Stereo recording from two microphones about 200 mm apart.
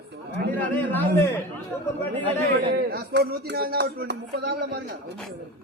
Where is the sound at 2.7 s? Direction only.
55° right (ahead or behind).